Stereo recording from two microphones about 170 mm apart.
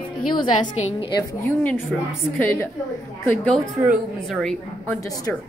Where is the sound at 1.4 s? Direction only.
10° left (ahead or behind).